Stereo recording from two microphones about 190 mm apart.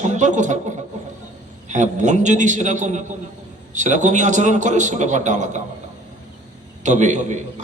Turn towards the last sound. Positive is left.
turn(degrees=-40)  # may be behind; listen again after turning